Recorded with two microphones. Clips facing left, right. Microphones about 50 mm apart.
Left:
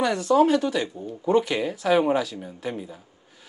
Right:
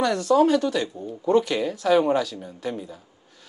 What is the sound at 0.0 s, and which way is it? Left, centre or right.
Speech, centre.